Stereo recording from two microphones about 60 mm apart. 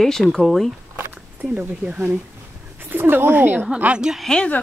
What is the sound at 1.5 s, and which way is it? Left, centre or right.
Speech, centre.